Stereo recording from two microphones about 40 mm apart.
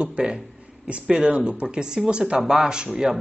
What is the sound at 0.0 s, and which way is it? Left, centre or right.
Speech, right.